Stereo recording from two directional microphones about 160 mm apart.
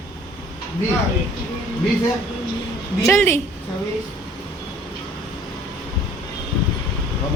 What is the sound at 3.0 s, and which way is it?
Speech, 15° left (ahead or behind).